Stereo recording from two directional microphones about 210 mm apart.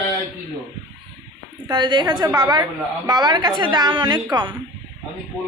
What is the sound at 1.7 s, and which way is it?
A woman's voice, 20° right (ahead or behind).